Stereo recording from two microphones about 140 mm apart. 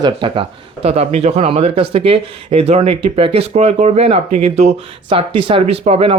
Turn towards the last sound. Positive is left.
turn(degrees=-45)  # may be behind; listen again after turning